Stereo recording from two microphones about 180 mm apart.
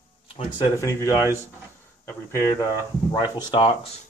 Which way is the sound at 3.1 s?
25° left (ahead or behind).